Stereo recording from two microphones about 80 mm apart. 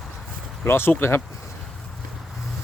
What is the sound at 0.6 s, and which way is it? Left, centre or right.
Speech, left.